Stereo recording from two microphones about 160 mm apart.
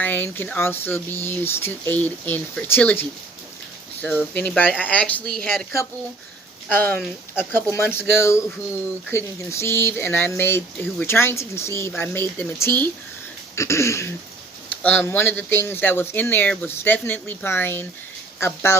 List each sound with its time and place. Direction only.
0.0 s speech: 10° left (ahead or behind)
4.4 s speech: 10° left (ahead or behind)
6.7 s speech: 15° left (ahead or behind)